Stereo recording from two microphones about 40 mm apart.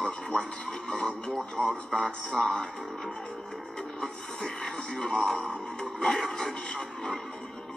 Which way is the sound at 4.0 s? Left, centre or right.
Left.